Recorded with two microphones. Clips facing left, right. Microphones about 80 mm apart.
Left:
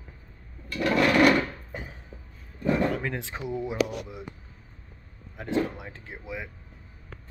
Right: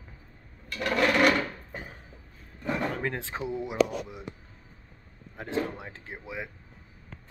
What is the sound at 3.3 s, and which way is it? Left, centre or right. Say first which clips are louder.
Speech: right 1 dB; right.